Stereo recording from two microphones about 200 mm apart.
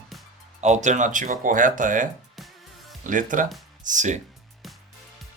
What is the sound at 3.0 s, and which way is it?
Speech, 40° right (ahead or behind).